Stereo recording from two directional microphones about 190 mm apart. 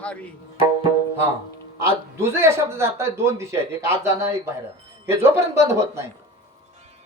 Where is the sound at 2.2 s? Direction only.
15° right (ahead or behind).